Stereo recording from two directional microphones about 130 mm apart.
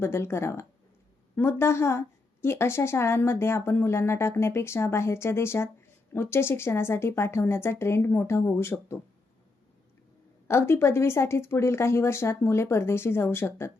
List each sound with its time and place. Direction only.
0.0 s a woman's voice: 20° left (ahead or behind)
10.5 s a woman's voice: 20° left (ahead or behind)